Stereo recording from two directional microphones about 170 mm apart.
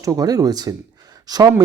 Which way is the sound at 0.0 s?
20° right (ahead or behind).